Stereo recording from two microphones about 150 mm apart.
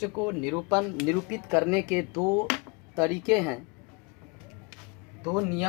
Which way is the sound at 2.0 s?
20° right (ahead or behind).